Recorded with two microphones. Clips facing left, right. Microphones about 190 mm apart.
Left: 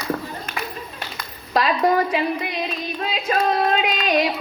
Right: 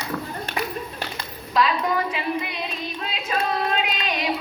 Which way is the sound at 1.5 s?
45° left (ahead or behind).